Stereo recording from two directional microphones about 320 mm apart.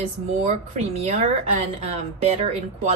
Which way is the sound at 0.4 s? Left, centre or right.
Right.